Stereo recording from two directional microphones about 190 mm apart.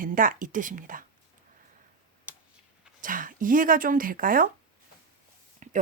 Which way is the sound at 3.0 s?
45° right (ahead or behind).